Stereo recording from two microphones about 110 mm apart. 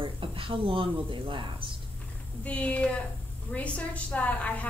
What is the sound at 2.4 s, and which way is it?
A woman's voice, 10° left (ahead or behind).